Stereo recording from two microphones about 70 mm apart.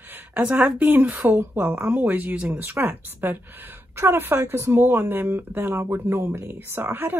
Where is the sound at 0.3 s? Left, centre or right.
Centre.